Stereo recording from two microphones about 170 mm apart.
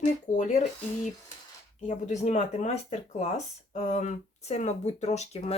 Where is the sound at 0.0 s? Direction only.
45° left (ahead or behind).